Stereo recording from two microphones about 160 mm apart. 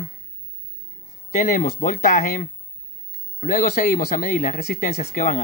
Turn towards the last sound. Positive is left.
turn(degrees=50)  # may be behind; listen again after turning